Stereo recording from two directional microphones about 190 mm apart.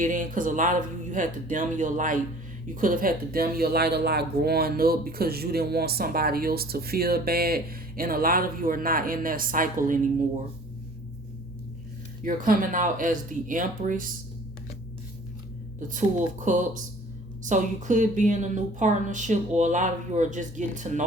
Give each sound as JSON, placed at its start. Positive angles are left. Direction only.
{"t": 0.0, "sound": "speech", "side_deg": -45}
{"t": 12.2, "sound": "speech", "side_deg": -45}
{"t": 15.9, "sound": "speech", "side_deg": -40}